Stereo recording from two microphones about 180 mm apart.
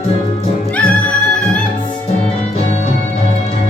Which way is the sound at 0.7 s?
5° left (ahead or behind).